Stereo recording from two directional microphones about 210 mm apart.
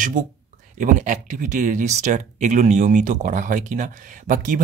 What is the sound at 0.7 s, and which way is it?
Speech, 35° right (ahead or behind).